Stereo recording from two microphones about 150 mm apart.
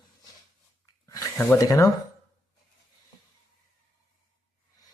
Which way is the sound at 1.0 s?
20° left (ahead or behind).